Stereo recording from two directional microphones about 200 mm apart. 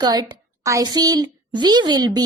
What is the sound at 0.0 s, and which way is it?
A woman's voice, 20° right (ahead or behind).